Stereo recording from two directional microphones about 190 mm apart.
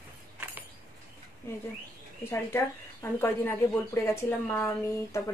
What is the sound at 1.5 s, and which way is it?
Speech, 15° left (ahead or behind).